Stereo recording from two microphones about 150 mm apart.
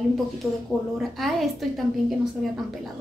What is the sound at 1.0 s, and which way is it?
A woman's voice, centre (ahead or behind).